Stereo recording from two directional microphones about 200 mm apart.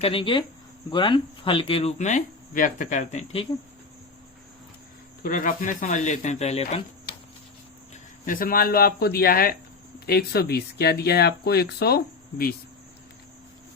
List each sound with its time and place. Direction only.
0.0 s speech: 25° left (ahead or behind)
5.2 s speech: 45° left (ahead or behind)
8.2 s speech: 45° left (ahead or behind)